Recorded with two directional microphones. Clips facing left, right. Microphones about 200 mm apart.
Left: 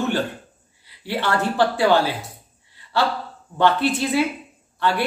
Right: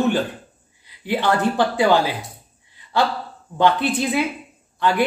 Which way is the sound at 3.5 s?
15° right (ahead or behind).